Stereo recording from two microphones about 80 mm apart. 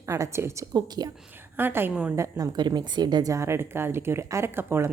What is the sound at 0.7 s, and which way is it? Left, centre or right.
Speech, right.